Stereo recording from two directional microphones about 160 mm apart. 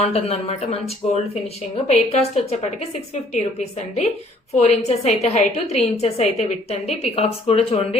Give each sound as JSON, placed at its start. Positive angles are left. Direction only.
{"t": 0.0, "sound": "a woman's voice", "side_deg": 40}